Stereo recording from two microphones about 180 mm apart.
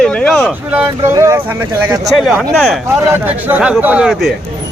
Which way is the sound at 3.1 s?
10° right (ahead or behind).